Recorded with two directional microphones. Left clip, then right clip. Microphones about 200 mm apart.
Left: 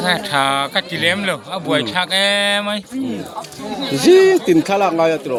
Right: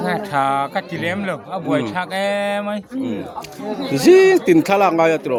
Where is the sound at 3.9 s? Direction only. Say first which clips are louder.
Even; 5° right (ahead or behind).